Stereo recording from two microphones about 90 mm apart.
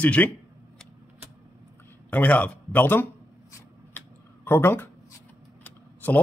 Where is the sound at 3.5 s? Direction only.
25° left (ahead or behind).